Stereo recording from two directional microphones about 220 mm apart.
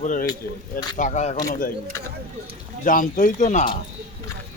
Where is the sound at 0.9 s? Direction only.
30° left (ahead or behind).